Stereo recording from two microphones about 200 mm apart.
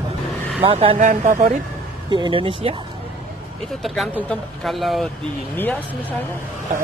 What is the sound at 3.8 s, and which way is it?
Speech, centre (ahead or behind).